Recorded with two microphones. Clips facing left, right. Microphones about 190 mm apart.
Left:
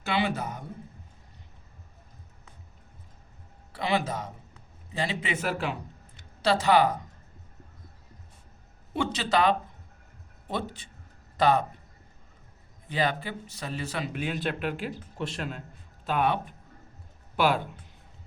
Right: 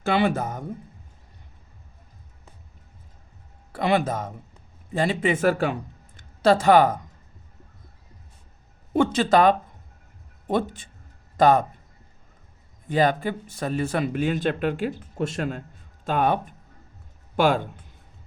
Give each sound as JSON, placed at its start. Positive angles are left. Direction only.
{"t": 0.0, "sound": "speech", "side_deg": -50}
{"t": 3.7, "sound": "a man's voice", "side_deg": -50}
{"t": 8.9, "sound": "speech", "side_deg": -50}
{"t": 12.9, "sound": "a man's voice", "side_deg": -45}